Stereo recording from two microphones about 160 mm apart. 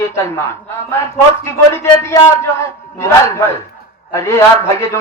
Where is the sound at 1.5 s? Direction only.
15° left (ahead or behind).